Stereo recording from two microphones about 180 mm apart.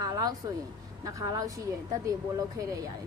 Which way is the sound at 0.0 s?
20° right (ahead or behind).